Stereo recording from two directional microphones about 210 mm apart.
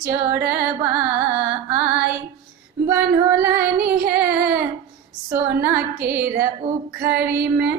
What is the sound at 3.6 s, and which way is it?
Music, 50° right (ahead or behind).